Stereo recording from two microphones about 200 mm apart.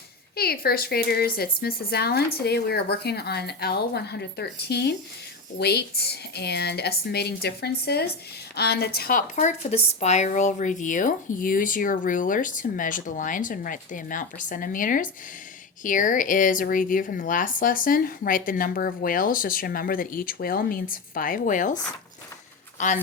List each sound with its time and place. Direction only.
0.3 s speech: 50° left (ahead or behind)